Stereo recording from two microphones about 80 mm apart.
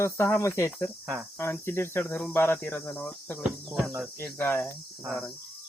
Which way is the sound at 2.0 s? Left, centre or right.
Left.